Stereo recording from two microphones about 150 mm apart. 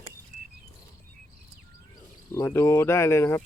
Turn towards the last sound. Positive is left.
turn(degrees=15)  # may be behind; listen again after turning